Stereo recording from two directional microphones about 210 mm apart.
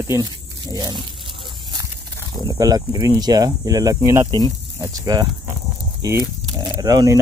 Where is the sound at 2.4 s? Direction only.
20° right (ahead or behind).